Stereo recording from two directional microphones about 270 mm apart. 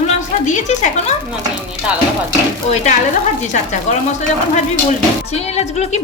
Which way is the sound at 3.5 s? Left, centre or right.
Left.